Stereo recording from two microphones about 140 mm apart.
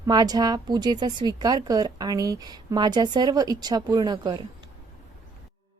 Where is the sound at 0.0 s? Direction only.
30° right (ahead or behind).